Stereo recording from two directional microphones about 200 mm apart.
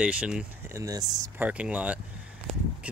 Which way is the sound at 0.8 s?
15° right (ahead or behind).